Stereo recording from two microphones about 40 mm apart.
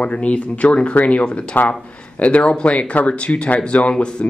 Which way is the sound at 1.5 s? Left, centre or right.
Left.